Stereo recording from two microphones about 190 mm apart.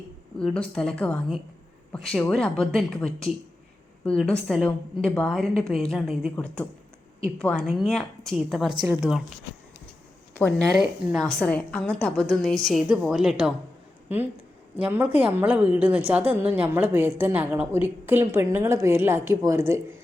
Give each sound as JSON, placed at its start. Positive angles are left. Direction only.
{"t": 0.3, "sound": "a woman's voice", "side_deg": 5}
{"t": 10.3, "sound": "a woman's voice", "side_deg": 5}